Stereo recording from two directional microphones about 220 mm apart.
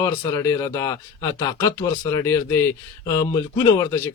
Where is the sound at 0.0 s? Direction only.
15° left (ahead or behind).